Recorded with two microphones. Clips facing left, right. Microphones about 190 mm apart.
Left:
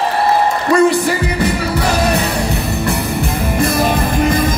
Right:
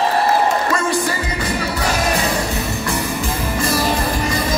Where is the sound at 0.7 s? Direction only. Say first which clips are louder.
Left 8 dB; 65° left (ahead or behind).